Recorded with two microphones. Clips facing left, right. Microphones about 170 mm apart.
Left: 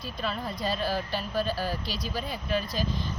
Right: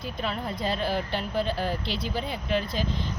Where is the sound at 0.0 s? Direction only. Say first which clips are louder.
Right 2 dB; 20° right (ahead or behind).